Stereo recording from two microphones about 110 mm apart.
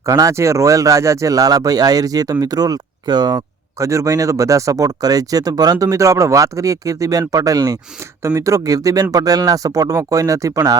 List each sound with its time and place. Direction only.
0.0 s speech: 30° right (ahead or behind)